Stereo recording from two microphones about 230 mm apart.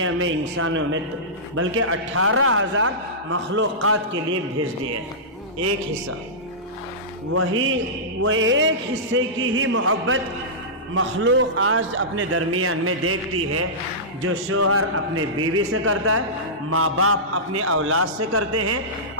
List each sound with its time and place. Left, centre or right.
0.0 s a man's voice: right
7.3 s a man's voice: right
14.3 s a man's voice: right